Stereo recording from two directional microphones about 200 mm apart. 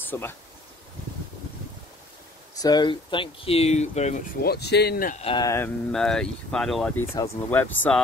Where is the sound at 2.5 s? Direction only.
20° left (ahead or behind).